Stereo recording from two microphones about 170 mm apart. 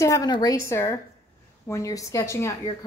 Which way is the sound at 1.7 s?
20° left (ahead or behind).